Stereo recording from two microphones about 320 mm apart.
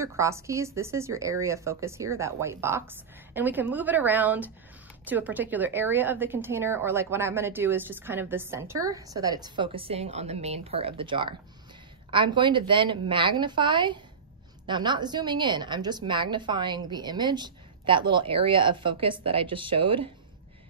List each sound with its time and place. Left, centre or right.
0.0 s a woman's voice: centre